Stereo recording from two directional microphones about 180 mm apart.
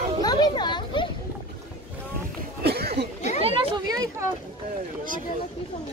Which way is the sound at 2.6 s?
65° right (ahead or behind).